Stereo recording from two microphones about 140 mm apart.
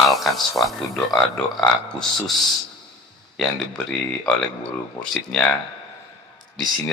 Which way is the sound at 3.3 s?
5° left (ahead or behind).